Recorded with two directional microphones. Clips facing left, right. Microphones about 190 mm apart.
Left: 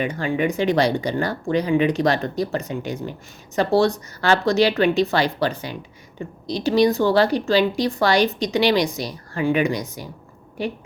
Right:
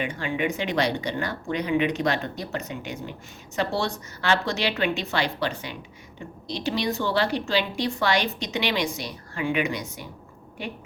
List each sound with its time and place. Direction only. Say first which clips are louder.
0.0 s speech: left 5 dB; 40° left (ahead or behind)